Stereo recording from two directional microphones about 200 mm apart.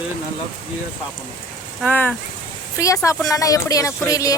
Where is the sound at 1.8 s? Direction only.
10° left (ahead or behind).